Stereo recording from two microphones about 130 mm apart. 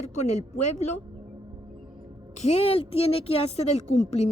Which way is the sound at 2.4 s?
55° left (ahead or behind).